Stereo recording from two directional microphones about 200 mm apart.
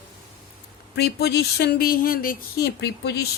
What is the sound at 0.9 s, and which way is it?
A woman's voice, 55° left (ahead or behind).